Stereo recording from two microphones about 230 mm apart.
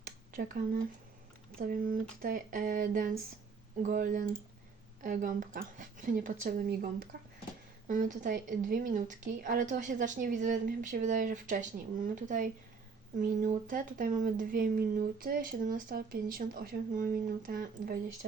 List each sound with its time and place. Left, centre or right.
0.3 s speech: right